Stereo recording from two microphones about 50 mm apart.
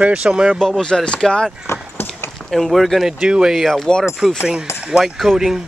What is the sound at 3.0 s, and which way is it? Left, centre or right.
Speech, centre.